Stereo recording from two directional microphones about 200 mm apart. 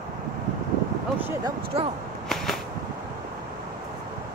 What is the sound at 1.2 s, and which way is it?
Speech, 15° right (ahead or behind).